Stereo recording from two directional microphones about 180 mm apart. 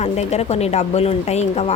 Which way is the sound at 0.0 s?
40° left (ahead or behind).